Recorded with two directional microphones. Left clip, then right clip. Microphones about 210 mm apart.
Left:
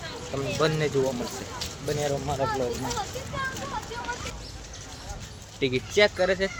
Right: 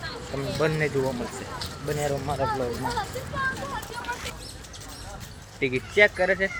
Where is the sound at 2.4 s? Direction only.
35° left (ahead or behind).